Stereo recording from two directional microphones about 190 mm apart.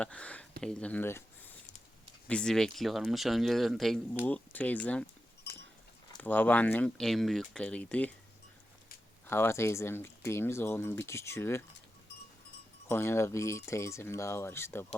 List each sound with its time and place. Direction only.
0.0 s speech: 5° left (ahead or behind)
5.5 s a sound: 60° left (ahead or behind)
6.1 s speech: 10° left (ahead or behind)
9.2 s speech: 10° left (ahead or behind)
12.9 s speech: 15° left (ahead or behind)